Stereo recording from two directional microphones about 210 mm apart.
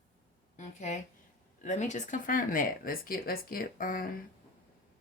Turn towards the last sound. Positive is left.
turn(degrees=40)  # may be behind; listen again after turning